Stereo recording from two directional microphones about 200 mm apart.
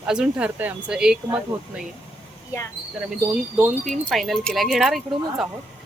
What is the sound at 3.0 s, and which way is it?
Speech, 5° right (ahead or behind).